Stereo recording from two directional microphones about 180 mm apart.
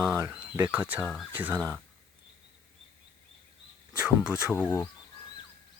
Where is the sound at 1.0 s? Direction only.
5° left (ahead or behind).